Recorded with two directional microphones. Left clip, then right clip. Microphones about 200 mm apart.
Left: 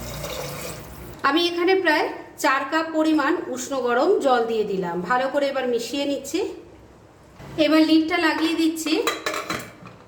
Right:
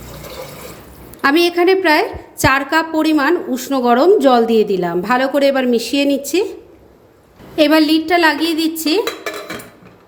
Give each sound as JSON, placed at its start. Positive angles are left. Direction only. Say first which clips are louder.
{"t": 1.2, "sound": "a woman's voice", "louder": "right 8 dB", "side_deg": -40}
{"t": 7.5, "sound": "a woman's voice", "louder": "right 5 dB", "side_deg": -55}